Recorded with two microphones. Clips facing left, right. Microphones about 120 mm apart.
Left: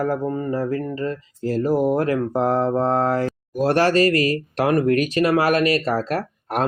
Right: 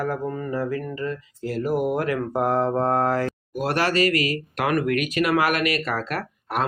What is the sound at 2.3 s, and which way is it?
Mantra, 25° left (ahead or behind).